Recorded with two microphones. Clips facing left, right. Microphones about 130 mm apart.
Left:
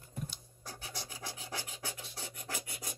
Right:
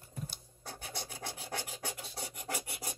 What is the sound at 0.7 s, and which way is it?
Rub, 60° right (ahead or behind).